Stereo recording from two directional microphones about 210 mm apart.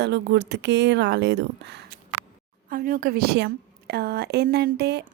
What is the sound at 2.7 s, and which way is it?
A woman's voice, 45° right (ahead or behind).